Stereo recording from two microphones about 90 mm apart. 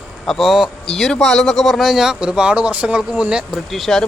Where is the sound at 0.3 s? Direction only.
Centre (ahead or behind).